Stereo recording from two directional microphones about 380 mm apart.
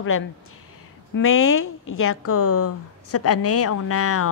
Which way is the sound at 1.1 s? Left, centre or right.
Left.